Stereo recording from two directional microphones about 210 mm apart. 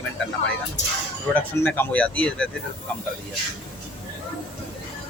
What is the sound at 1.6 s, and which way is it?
Speech, 10° left (ahead or behind).